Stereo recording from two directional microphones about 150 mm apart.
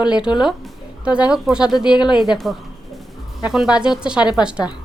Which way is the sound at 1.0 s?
5° right (ahead or behind).